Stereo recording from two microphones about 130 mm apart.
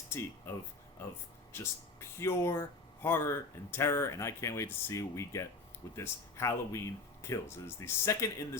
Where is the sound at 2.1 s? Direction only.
20° left (ahead or behind).